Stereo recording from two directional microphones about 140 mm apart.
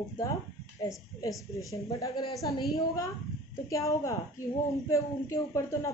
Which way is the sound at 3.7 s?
25° left (ahead or behind).